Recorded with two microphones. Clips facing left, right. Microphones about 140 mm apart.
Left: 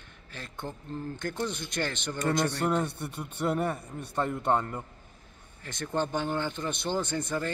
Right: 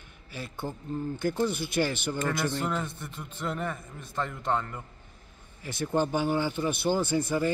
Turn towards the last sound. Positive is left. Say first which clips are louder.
# right 4 dB
turn(degrees=-5)  # may be behind; listen again after turning